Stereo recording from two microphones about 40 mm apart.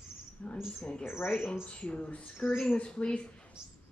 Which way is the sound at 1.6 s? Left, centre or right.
Left.